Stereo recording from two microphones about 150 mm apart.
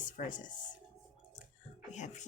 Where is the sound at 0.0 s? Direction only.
60° left (ahead or behind).